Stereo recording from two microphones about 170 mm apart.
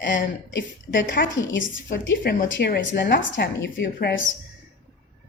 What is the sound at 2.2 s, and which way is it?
Speech, 55° left (ahead or behind).